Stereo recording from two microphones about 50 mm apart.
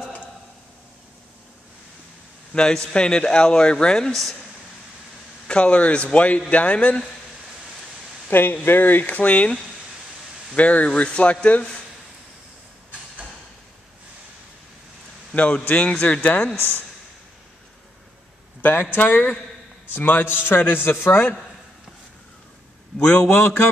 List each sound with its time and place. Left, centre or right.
2.5 s speech: centre
5.5 s a man's voice: left
8.3 s a man's voice: left
15.3 s a man's voice: left
16.5 s a man's voice: left
18.6 s a man's voice: left
22.9 s speech: centre
23.4 s a man's voice: left